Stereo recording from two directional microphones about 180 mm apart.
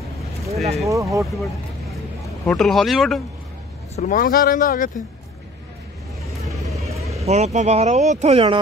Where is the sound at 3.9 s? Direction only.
45° left (ahead or behind).